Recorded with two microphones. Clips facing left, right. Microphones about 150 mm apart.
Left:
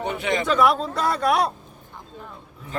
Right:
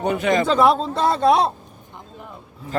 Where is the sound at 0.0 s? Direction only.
45° right (ahead or behind).